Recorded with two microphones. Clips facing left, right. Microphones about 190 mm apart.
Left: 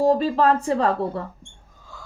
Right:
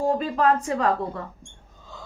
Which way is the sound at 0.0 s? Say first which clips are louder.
Left 4 dB; 35° left (ahead or behind).